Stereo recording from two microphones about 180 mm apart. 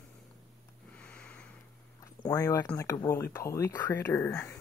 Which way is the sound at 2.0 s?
15° left (ahead or behind).